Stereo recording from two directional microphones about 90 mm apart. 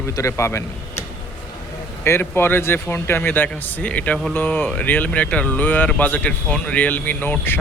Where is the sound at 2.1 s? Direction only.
25° left (ahead or behind).